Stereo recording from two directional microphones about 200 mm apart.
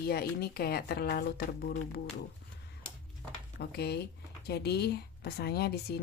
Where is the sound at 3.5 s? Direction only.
55° left (ahead or behind).